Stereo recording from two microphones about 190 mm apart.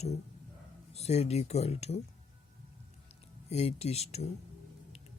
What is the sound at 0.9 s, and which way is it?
Speech, 35° left (ahead or behind).